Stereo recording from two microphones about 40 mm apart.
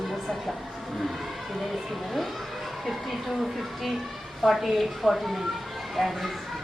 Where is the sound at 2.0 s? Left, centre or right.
Centre.